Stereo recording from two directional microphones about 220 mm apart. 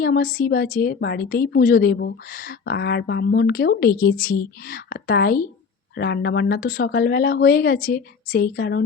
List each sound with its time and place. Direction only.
0.0 s a woman's voice: 40° left (ahead or behind)